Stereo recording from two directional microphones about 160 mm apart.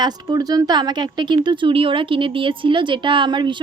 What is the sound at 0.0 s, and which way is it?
Speech, 25° right (ahead or behind).